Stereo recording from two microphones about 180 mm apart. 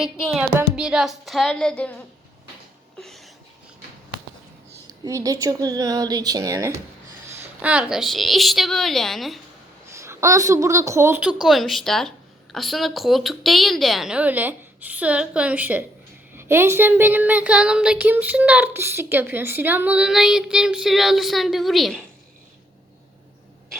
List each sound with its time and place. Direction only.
0.0 s a woman's voice: 5° right (ahead or behind)
3.0 s a sound: centre (ahead or behind)
4.9 s a woman's voice: 20° right (ahead or behind)
7.3 s a woman's voice: 5° right (ahead or behind)
9.9 s a woman's voice: 15° right (ahead or behind); by 22.0 s centre (ahead or behind)